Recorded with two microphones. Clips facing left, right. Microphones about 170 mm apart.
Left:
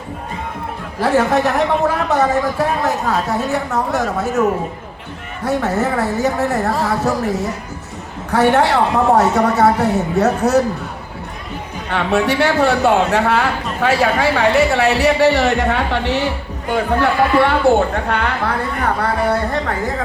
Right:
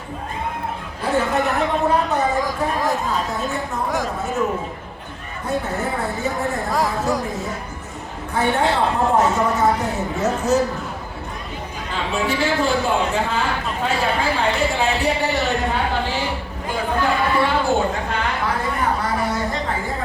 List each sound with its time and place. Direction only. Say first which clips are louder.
0.9 s a man's voice: left 6 dB; 90° left; by 3.8 s 75° left (ahead or behind)
5.5 s speech: left 6 dB; 80° left
11.9 s speech: left 7 dB; 70° left (ahead or behind)